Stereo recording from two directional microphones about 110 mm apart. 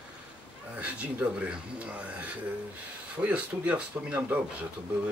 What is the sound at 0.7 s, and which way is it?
Speech, 10° right (ahead or behind).